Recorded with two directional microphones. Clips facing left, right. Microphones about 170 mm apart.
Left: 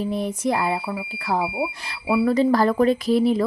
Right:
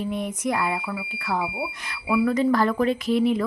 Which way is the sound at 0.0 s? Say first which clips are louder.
Left 3 dB; 35° left (ahead or behind).